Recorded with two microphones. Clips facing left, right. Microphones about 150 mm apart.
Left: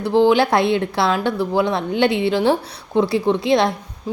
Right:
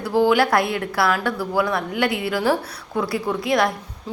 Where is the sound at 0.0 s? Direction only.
20° left (ahead or behind).